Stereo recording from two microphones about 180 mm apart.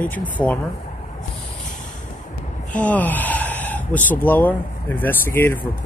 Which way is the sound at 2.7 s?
10° left (ahead or behind).